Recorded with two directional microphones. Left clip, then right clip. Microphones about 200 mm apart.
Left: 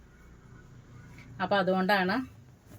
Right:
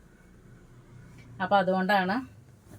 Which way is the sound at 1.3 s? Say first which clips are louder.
Right 3 dB; 20° left (ahead or behind).